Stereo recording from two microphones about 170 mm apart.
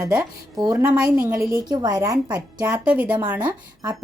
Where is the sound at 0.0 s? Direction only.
20° right (ahead or behind).